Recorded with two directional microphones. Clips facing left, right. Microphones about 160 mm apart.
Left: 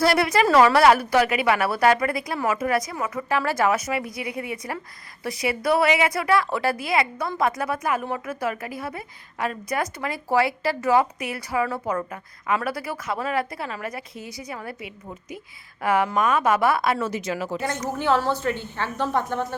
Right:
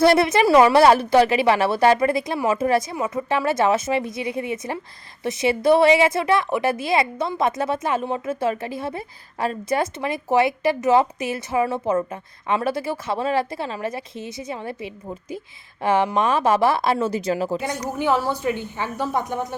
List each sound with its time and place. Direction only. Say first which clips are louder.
0.0 s a woman's voice: right 4 dB; 25° right (ahead or behind)
17.9 s a woman's voice: right 1 dB; 15° right (ahead or behind)